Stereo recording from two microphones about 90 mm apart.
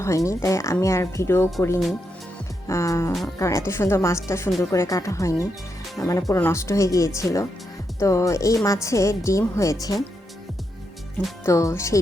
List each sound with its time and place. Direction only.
0.0 s speech: 35° left (ahead or behind)
2.6 s speech: 35° left (ahead or behind)
11.4 s speech: 35° left (ahead or behind)